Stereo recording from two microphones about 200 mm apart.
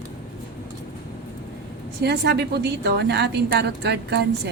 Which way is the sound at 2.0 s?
55° right (ahead or behind).